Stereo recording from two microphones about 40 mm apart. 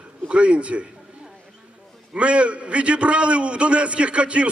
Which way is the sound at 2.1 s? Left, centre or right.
Right.